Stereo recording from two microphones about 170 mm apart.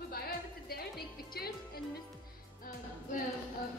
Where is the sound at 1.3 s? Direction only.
70° left (ahead or behind).